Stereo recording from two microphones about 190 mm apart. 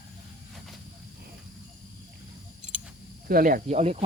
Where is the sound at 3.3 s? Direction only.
50° right (ahead or behind).